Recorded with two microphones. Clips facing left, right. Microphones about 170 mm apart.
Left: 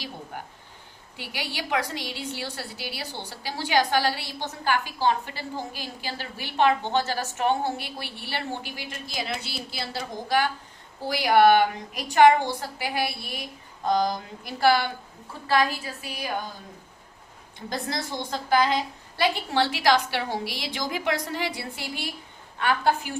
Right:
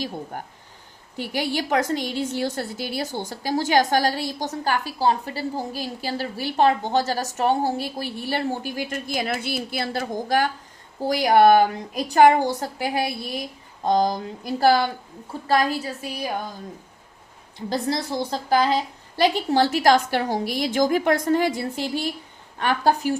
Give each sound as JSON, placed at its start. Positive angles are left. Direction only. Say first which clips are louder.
{"t": 0.3, "sound": "a woman's voice", "louder": "right 3 dB", "side_deg": -45}
{"t": 13.8, "sound": "speech", "louder": "right 3 dB", "side_deg": -30}
{"t": 14.4, "sound": "a woman's voice", "louder": "right 3 dB", "side_deg": -40}
{"t": 17.7, "sound": "a woman's voice", "louder": "right 6 dB", "side_deg": -35}